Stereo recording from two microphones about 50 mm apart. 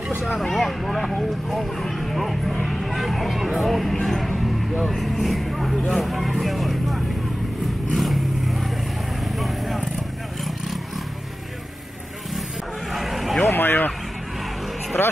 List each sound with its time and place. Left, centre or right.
0.2 s speech: centre
7.6 s vehicle: centre
12.9 s vehicle: centre
13.5 s speech: left
15.0 s speech: left